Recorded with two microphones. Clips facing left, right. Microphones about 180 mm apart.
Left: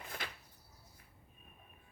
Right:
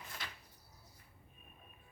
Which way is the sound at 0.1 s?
55° left (ahead or behind).